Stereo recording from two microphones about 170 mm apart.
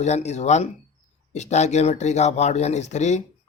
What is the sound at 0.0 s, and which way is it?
Speech, 40° left (ahead or behind).